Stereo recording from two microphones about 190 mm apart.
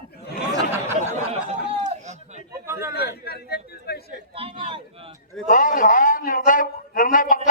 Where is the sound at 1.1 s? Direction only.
35° right (ahead or behind).